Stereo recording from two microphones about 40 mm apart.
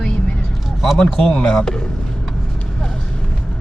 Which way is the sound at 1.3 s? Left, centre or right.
Left.